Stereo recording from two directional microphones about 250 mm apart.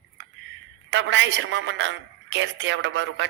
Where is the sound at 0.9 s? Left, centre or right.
Right.